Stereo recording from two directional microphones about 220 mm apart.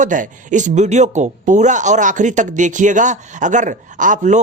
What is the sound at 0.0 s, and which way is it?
Speech, 35° right (ahead or behind).